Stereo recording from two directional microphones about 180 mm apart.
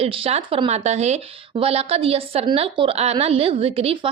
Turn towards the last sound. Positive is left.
turn(degrees=-30)  # may be behind; listen again after turning